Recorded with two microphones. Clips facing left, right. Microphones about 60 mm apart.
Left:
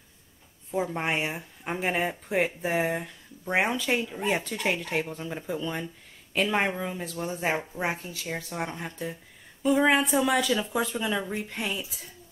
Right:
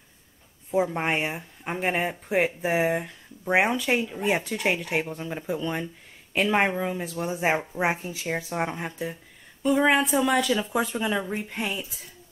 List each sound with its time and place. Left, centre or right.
0.7 s speech: centre
7.5 s speech: centre
9.6 s speech: centre